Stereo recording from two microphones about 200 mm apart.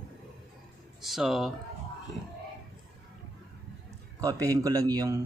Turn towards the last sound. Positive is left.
turn(degrees=-15)  # may be behind; listen again after turning